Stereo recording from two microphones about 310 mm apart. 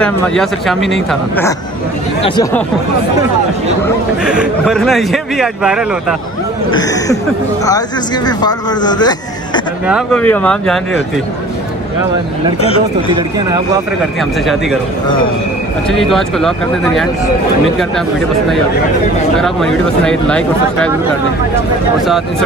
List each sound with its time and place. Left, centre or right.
0.0 s a man's voice: centre
4.2 s a man's voice: centre
6.7 s speech: centre
8.3 s speech: centre
9.8 s a man's voice: centre
15.9 s a man's voice: centre
19.4 s a man's voice: centre